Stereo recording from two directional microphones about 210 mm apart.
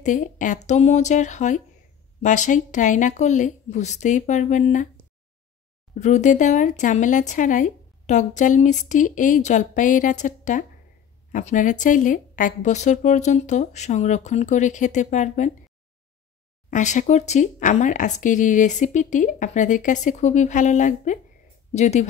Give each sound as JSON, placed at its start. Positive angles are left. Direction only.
{"t": 0.0, "sound": "speech", "side_deg": 35}
{"t": 5.9, "sound": "speech", "side_deg": 35}
{"t": 16.7, "sound": "speech", "side_deg": 35}